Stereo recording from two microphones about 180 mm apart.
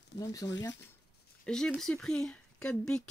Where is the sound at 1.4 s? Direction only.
5° left (ahead or behind).